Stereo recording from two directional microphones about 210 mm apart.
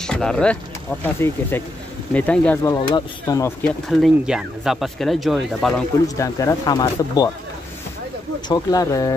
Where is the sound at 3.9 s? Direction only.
Centre (ahead or behind).